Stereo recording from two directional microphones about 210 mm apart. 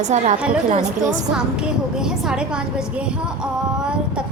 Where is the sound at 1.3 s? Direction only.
5° right (ahead or behind).